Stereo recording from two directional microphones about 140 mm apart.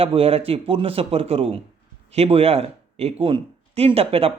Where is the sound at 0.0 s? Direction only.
45° right (ahead or behind).